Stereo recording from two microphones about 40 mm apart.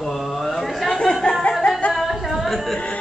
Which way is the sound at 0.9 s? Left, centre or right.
Centre.